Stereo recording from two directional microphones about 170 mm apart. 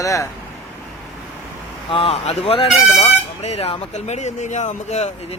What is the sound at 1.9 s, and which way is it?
Speech, 35° left (ahead or behind).